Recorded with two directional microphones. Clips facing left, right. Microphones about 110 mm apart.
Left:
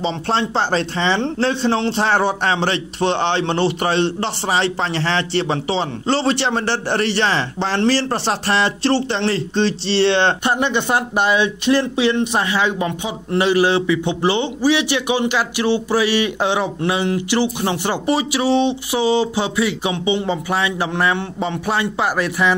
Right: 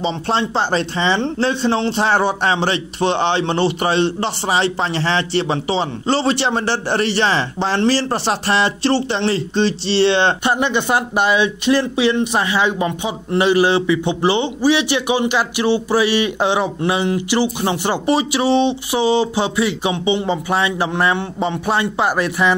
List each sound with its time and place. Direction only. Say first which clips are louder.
0.0 s a man's voice: right 1 dB; 5° right (ahead or behind); by 22.6 s 25° right (ahead or behind)